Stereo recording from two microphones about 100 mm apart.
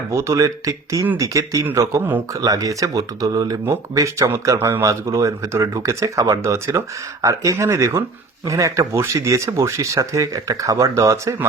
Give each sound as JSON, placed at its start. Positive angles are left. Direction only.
{"t": 0.1, "sound": "speech", "side_deg": -30}